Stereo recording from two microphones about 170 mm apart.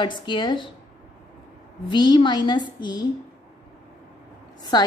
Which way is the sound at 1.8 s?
25° left (ahead or behind).